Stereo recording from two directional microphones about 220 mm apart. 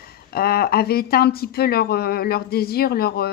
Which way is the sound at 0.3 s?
45° left (ahead or behind).